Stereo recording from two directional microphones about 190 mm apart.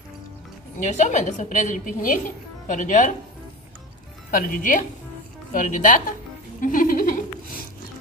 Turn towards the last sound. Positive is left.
turn(degrees=45)  # may be behind; listen again after turning